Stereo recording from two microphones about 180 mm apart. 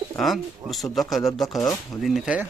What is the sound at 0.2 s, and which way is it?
Speech, centre (ahead or behind).